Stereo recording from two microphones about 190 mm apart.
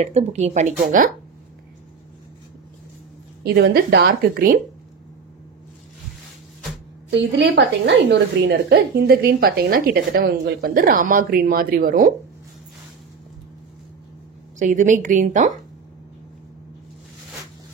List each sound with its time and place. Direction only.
0.0 s a woman's voice: 35° right (ahead or behind)
3.4 s a woman's voice: 55° right (ahead or behind)
7.1 s a woman's voice: 65° right (ahead or behind); by 12.1 s 45° right (ahead or behind)
14.6 s a woman's voice: 40° right (ahead or behind)